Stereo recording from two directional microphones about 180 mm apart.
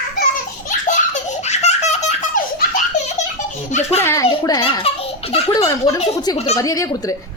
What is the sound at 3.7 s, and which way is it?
Baby laughter, 40° left (ahead or behind).